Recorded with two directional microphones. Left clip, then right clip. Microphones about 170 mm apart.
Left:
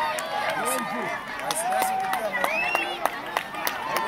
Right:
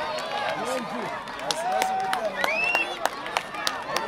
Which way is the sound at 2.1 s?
Centre (ahead or behind).